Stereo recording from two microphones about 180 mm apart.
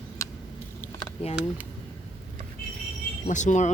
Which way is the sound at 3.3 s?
45° left (ahead or behind).